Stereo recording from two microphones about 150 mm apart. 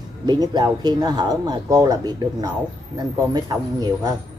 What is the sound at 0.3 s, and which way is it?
Speech, 25° right (ahead or behind).